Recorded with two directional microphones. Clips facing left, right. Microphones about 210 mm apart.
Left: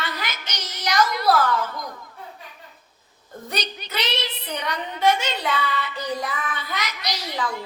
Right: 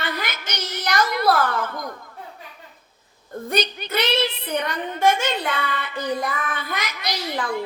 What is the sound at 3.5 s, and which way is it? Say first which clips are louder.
A woman's voice: right 7 dB; 55° right (ahead or behind).